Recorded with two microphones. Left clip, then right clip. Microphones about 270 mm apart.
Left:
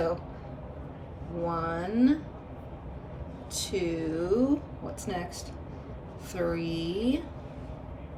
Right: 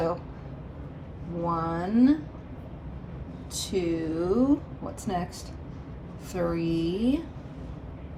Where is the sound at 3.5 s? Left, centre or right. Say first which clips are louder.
Right 2 dB; centre.